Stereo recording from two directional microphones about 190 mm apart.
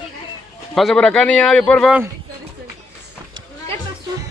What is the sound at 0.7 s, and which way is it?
Speech, centre (ahead or behind).